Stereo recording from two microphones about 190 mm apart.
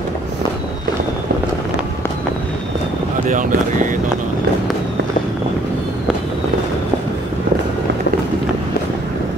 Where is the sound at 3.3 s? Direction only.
45° right (ahead or behind).